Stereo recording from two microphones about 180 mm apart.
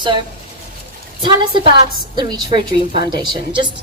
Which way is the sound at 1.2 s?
25° right (ahead or behind).